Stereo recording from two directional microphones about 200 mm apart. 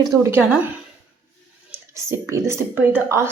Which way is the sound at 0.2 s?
10° right (ahead or behind).